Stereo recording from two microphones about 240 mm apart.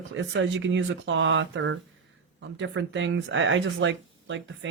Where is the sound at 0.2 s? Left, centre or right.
Right.